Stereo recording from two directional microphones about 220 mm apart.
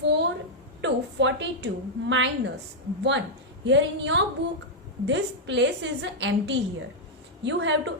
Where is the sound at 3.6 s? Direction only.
55° right (ahead or behind).